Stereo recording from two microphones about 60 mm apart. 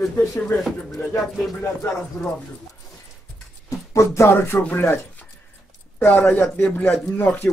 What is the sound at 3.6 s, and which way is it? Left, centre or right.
Speech, left.